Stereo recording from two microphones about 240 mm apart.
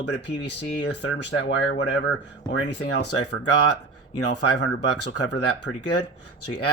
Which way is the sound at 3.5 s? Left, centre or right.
Left.